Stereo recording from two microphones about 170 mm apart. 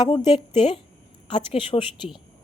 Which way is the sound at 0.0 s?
25° left (ahead or behind).